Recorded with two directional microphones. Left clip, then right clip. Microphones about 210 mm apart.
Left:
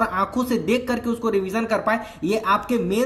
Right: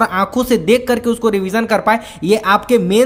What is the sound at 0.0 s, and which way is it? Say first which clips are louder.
Speech: right 7 dB; 35° right (ahead or behind).